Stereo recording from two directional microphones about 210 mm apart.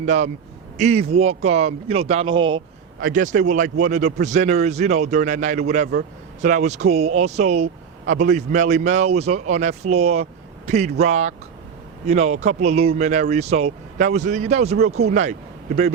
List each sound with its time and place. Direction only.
0.0 s speech: 35° right (ahead or behind)
3.0 s speech: 40° right (ahead or behind)
14.8 s speech: 90° right
15.1 s a man's voice: 35° right (ahead or behind)